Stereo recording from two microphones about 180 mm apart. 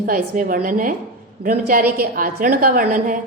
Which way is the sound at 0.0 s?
50° right (ahead or behind).